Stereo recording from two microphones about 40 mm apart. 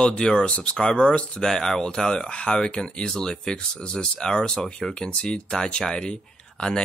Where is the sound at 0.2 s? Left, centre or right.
Left.